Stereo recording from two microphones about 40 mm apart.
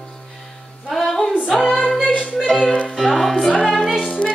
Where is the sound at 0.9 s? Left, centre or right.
Centre.